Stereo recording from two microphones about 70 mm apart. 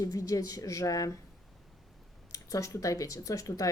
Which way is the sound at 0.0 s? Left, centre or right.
Left.